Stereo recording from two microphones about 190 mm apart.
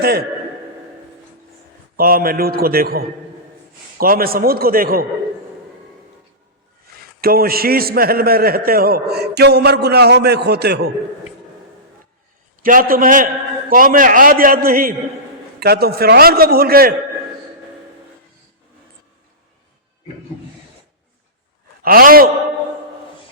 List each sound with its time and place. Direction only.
2.0 s a man's voice: 50° right (ahead or behind)
7.2 s a man's voice: 50° right (ahead or behind)
12.6 s a man's voice: 45° right (ahead or behind)
21.8 s a man's voice: 50° right (ahead or behind)